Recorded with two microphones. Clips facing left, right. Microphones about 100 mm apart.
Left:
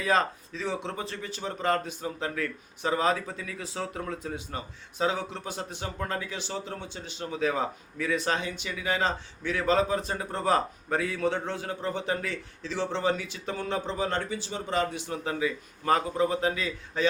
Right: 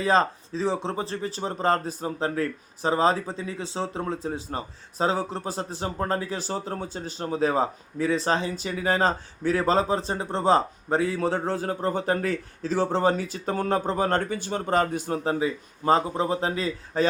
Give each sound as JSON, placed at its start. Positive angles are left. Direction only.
{"t": 0.0, "sound": "speech", "side_deg": -30}